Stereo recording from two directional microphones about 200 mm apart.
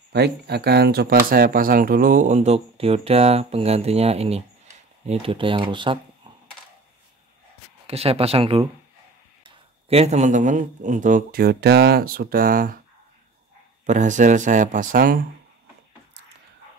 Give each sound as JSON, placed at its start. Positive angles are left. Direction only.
{"t": 0.1, "sound": "speech", "side_deg": -55}
{"t": 7.8, "sound": "speech", "side_deg": -30}
{"t": 13.8, "sound": "speech", "side_deg": -40}